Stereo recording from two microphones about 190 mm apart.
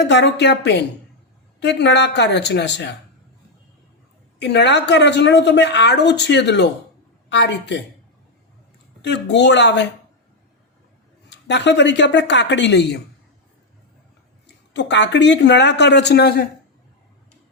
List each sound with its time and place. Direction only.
0.1 s a woman's voice: 65° left (ahead or behind)
4.4 s a woman's voice: 65° left (ahead or behind)
9.0 s speech: 65° left (ahead or behind)
11.3 s speech: 65° left (ahead or behind)
14.4 s speech: 70° left (ahead or behind)